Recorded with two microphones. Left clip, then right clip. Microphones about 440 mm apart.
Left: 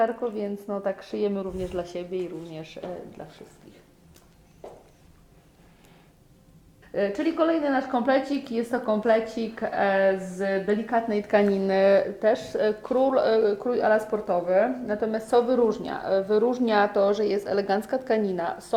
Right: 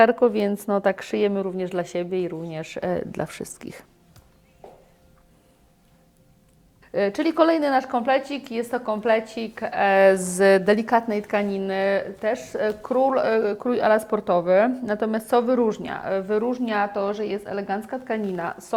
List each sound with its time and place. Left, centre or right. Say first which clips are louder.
0.0 s speech: right 8 dB; right
6.9 s a woman's voice: right 4 dB; right
7.9 s a woman's voice: right 1 dB; right
10.0 s speech: right 7 dB; right
11.1 s speech: left 2 dB; right